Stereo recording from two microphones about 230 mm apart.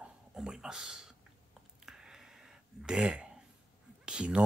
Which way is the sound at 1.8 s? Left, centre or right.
Centre.